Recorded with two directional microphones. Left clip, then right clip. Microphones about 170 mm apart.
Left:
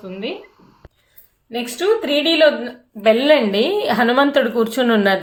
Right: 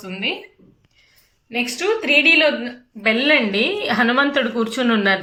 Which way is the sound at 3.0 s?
35° left (ahead or behind).